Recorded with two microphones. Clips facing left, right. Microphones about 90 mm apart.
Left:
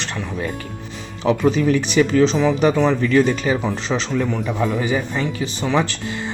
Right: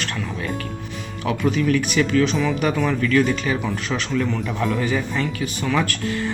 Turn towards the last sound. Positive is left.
turn(degrees=20)  # may be behind; listen again after turning